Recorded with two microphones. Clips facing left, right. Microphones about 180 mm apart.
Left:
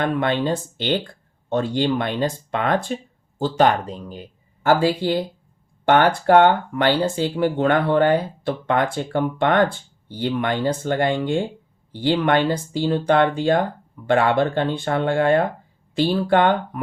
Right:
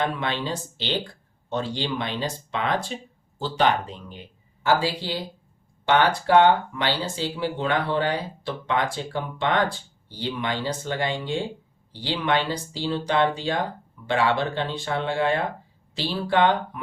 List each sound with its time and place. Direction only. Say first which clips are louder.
0.0 s speech: left 6 dB; 50° left (ahead or behind)